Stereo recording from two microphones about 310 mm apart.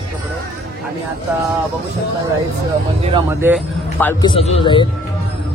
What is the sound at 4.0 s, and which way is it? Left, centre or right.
Speech, centre.